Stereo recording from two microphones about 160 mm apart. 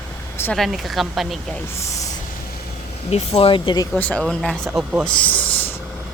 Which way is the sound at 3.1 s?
35° left (ahead or behind).